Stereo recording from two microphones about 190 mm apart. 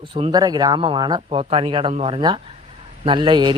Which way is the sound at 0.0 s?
25° right (ahead or behind).